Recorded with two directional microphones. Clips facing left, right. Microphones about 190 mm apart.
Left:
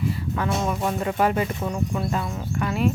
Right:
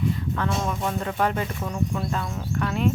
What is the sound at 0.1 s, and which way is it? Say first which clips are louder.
Speech: left 1 dB; 5° left (ahead or behind).